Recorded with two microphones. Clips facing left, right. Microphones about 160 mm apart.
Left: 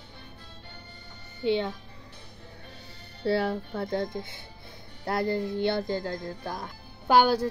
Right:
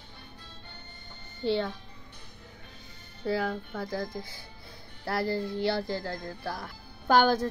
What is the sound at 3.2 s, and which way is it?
A child's voice, 30° left (ahead or behind).